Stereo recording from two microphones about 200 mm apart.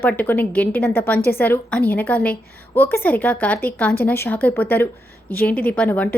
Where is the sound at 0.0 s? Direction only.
10° left (ahead or behind).